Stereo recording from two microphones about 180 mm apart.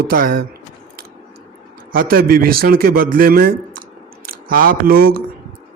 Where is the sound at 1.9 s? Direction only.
55° right (ahead or behind).